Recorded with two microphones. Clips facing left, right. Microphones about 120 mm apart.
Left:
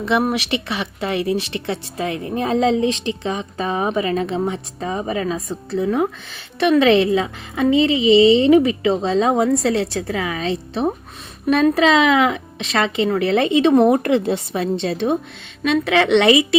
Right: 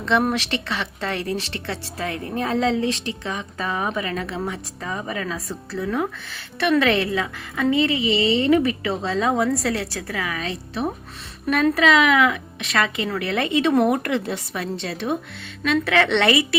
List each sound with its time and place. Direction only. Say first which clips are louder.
0.0 s speech: left 2 dB; 10° left (ahead or behind)